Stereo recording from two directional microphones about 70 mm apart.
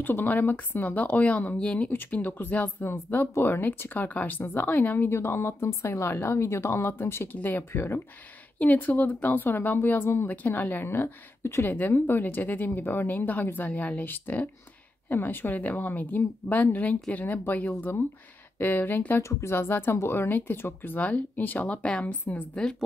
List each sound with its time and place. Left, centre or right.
0.0 s speech: left
1.9 s speech: left
8.5 s speech: left
19.2 s speech: left
21.8 s a woman's voice: centre